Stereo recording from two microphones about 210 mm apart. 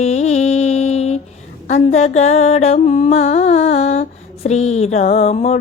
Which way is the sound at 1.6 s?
35° left (ahead or behind).